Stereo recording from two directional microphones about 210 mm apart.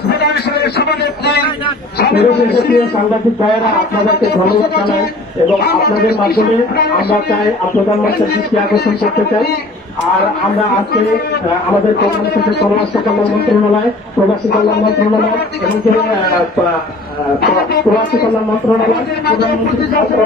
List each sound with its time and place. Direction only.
0.1 s a man's voice: 50° left (ahead or behind)
4.1 s a man's voice: 50° left (ahead or behind)
12.0 s a man's voice: 50° left (ahead or behind)
14.5 s a man's voice: 50° left (ahead or behind)
19.2 s a man's voice: 50° left (ahead or behind)